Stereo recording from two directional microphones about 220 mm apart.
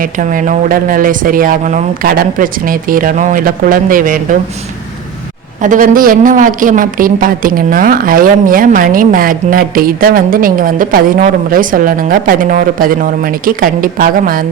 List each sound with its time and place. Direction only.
0.0 s speech: 40° right (ahead or behind)
5.6 s speech: 40° right (ahead or behind)